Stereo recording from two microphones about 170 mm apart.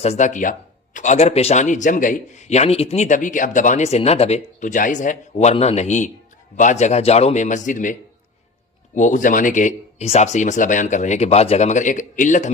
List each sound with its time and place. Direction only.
0.0 s a man's voice: 40° left (ahead or behind)
9.0 s a man's voice: 50° left (ahead or behind)